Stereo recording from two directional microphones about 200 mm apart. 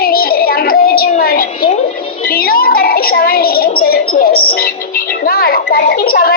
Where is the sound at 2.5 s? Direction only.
50° left (ahead or behind).